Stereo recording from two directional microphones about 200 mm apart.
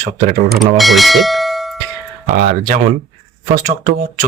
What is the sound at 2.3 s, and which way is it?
Speech, 40° right (ahead or behind).